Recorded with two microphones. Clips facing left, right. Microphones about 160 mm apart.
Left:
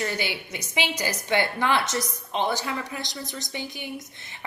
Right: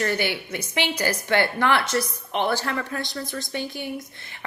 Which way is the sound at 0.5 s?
15° left (ahead or behind).